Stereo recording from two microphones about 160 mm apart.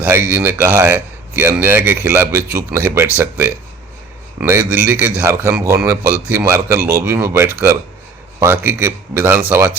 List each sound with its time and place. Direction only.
0.0 s speech: 10° right (ahead or behind)